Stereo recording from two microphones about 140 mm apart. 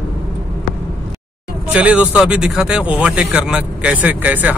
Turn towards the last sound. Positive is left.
turn(degrees=-10)  # may be behind; listen again after turning